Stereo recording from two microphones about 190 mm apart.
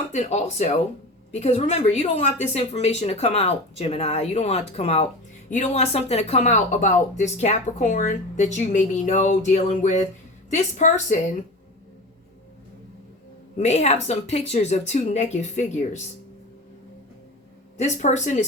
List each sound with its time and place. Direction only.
0.1 s speech: 40° left (ahead or behind)
13.6 s speech: 35° left (ahead or behind)
17.7 s speech: 40° left (ahead or behind)